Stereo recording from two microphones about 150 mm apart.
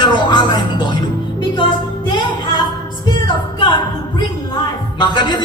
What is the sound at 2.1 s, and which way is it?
Music, 30° left (ahead or behind).